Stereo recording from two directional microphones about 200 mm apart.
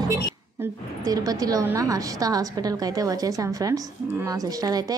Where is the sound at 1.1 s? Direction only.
20° right (ahead or behind).